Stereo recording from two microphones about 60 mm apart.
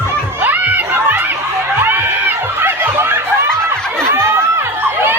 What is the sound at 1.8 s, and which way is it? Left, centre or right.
Snicker, right.